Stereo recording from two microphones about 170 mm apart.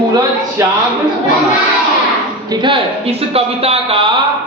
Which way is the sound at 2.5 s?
30° right (ahead or behind).